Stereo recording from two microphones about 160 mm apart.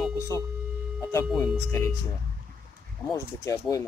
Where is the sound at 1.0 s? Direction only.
15° left (ahead or behind).